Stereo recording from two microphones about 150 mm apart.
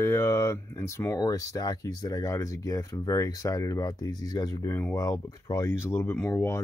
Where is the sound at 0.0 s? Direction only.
20° left (ahead or behind).